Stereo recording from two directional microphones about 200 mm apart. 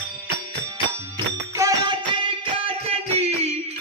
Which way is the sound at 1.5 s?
15° right (ahead or behind).